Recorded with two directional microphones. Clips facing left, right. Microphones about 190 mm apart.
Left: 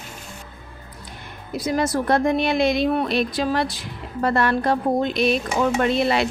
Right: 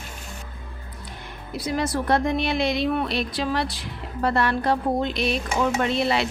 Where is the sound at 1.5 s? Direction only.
45° left (ahead or behind).